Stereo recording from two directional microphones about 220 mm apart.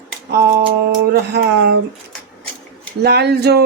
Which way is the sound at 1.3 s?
50° right (ahead or behind).